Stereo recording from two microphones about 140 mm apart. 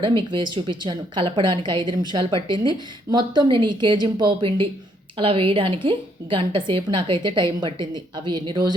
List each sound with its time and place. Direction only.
0.2 s a woman's voice: 35° right (ahead or behind)